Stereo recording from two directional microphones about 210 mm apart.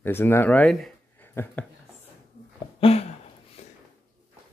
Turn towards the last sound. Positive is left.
turn(degrees=30)  # may be behind; listen again after turning